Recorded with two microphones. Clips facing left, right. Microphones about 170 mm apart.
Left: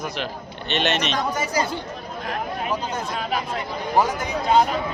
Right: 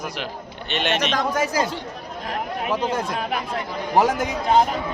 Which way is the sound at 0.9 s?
50° right (ahead or behind).